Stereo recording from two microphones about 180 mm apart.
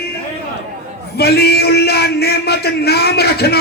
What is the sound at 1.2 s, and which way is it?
Speech, 60° left (ahead or behind).